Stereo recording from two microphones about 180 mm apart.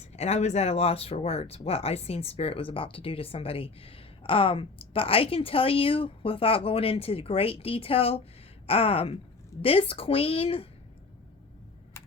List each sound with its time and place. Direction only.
0.1 s speech: 35° left (ahead or behind)